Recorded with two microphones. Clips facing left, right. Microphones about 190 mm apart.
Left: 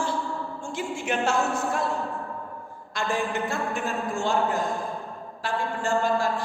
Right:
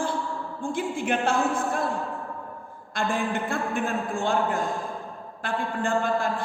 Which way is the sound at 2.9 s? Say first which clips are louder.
Right 1 dB; 55° right (ahead or behind).